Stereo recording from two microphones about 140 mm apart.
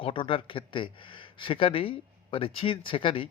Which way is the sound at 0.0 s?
40° left (ahead or behind).